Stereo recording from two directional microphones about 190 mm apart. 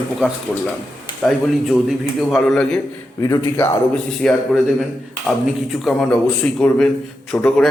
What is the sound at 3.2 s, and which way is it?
Speech, 15° left (ahead or behind).